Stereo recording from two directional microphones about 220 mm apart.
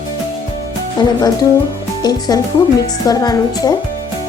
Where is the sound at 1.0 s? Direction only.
15° left (ahead or behind).